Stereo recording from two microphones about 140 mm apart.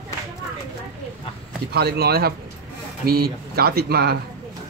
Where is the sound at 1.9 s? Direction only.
90° right.